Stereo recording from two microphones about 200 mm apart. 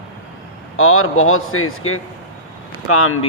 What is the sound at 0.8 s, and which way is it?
A man's voice, 90° left.